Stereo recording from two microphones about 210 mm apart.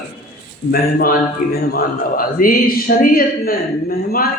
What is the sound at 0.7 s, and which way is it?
A man's voice, 45° left (ahead or behind).